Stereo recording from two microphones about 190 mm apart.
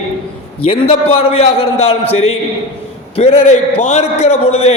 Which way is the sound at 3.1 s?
35° left (ahead or behind).